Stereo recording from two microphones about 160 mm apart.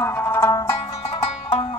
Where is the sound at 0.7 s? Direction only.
40° left (ahead or behind).